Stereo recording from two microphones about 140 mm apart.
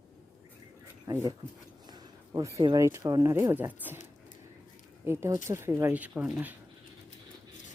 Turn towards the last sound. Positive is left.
turn(degrees=-10)  # may be behind; listen again after turning